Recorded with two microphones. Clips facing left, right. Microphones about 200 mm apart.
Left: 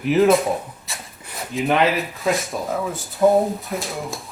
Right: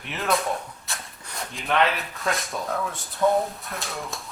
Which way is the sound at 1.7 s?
Centre (ahead or behind).